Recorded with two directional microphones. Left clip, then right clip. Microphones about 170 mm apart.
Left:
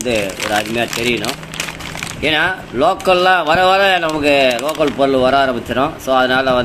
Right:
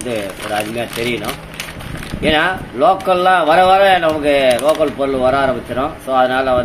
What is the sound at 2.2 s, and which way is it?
A man's voice, 40° left (ahead or behind).